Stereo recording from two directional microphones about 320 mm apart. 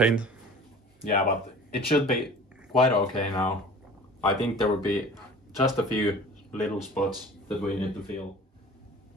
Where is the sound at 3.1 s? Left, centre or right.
Centre.